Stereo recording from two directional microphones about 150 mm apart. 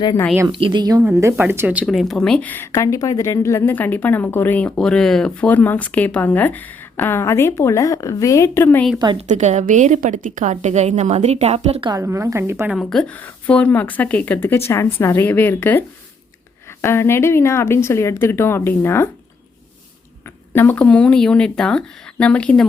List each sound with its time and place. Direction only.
0.4 s a woman's voice: 35° right (ahead or behind)
1.1 s speech: 15° right (ahead or behind)
1.8 s speech: centre (ahead or behind); by 8.8 s 15° left (ahead or behind)
9.1 s a woman's voice: 50° right (ahead or behind)
11.9 s a woman's voice: 20° right (ahead or behind)
12.7 s speech: 5° left (ahead or behind)
16.8 s speech: 15° left (ahead or behind)
20.5 s speech: 15° left (ahead or behind)